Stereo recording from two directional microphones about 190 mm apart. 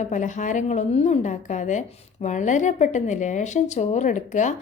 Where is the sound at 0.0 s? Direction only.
40° left (ahead or behind).